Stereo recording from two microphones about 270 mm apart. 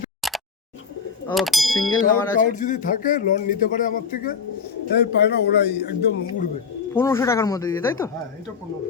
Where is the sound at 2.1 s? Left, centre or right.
Left.